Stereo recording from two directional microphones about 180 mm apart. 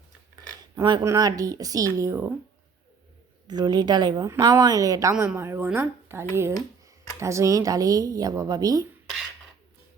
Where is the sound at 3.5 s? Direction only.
20° right (ahead or behind).